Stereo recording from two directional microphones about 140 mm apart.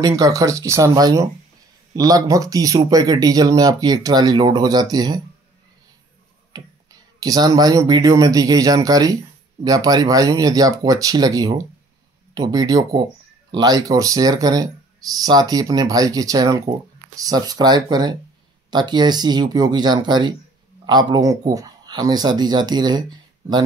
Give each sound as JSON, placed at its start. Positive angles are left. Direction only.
{"t": 0.0, "sound": "speech", "side_deg": -25}
{"t": 7.2, "sound": "speech", "side_deg": -25}